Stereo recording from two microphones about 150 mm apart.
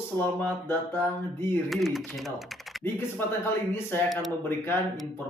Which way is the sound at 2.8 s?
15° left (ahead or behind).